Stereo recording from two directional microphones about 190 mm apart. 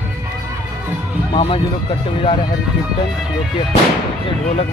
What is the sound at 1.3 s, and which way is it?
Speech, 25° left (ahead or behind).